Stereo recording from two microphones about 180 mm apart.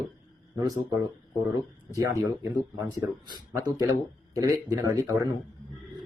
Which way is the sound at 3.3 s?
20° right (ahead or behind).